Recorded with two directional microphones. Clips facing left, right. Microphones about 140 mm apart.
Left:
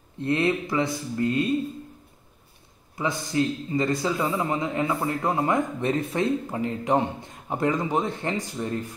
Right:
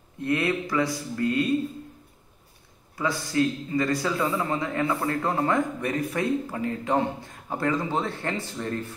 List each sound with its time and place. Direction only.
0.2 s a man's voice: 25° left (ahead or behind)
3.0 s a man's voice: 20° left (ahead or behind)